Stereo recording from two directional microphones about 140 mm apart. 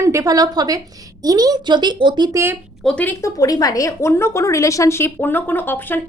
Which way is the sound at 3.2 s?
25° left (ahead or behind).